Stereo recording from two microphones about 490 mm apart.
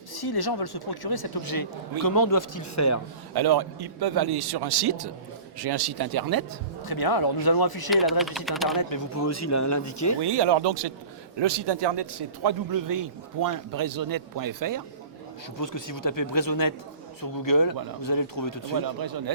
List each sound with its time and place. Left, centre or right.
0.1 s speech: left
3.3 s a man's voice: right
6.8 s speech: left
7.9 s speech: centre
8.7 s speech: left
10.2 s a man's voice: right
15.5 s speech: left
18.9 s a man's voice: right